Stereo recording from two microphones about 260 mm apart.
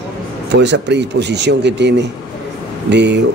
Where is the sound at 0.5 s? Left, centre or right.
Right.